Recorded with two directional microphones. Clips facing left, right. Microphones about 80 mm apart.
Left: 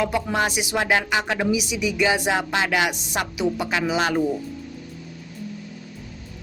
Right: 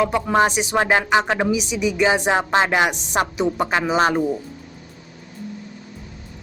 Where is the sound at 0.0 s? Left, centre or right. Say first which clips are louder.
Right 5 dB; right.